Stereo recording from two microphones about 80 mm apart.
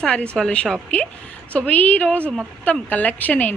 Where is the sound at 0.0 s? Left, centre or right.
Centre.